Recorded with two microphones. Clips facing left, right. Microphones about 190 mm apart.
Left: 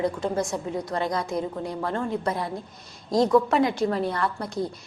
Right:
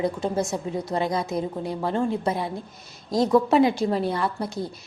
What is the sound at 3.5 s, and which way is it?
Speech, 25° right (ahead or behind).